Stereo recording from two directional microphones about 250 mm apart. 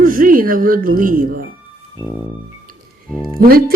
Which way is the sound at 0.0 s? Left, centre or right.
Right.